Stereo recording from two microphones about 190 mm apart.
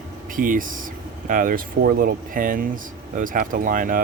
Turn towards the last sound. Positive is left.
turn(degrees=-45)  # may be behind; listen again after turning